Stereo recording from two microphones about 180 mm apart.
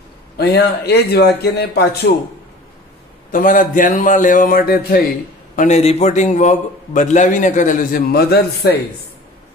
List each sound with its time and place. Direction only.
0.4 s speech: 65° left (ahead or behind)
3.3 s a man's voice: 50° left (ahead or behind)
5.6 s a man's voice: 40° left (ahead or behind); by 8.7 s 60° left (ahead or behind)